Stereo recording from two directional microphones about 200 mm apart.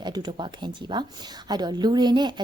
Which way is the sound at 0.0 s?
20° right (ahead or behind).